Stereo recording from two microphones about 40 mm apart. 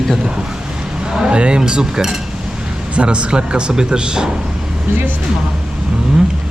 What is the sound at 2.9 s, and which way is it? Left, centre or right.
Speech, right.